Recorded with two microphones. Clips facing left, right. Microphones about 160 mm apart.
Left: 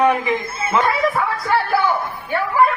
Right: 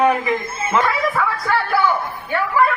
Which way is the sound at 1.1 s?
25° left (ahead or behind).